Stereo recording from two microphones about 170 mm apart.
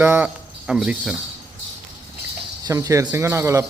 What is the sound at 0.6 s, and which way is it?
Pulleys, 5° right (ahead or behind).